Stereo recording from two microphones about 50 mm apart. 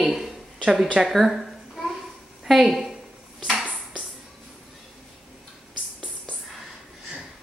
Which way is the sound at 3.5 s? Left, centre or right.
Centre.